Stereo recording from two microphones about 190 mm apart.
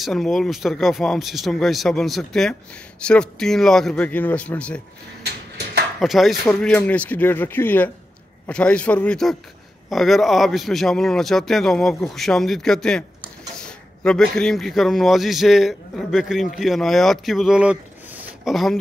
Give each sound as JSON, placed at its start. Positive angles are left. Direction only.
{"t": 0.0, "sound": "speech", "side_deg": 0}
{"t": 5.2, "sound": "a sound", "side_deg": -60}
{"t": 5.9, "sound": "a man's voice", "side_deg": 0}